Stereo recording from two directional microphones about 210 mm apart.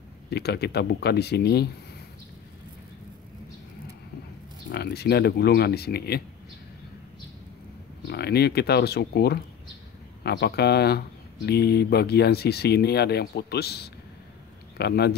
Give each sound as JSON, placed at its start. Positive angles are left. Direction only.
{"t": 0.3, "sound": "speech", "side_deg": 50}
{"t": 4.6, "sound": "speech", "side_deg": 50}
{"t": 8.1, "sound": "speech", "side_deg": 50}